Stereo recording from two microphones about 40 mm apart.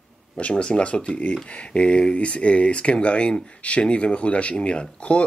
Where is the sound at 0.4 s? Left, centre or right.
Left.